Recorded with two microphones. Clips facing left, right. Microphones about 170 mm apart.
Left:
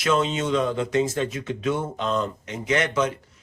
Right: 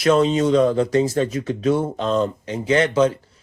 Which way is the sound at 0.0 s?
35° right (ahead or behind).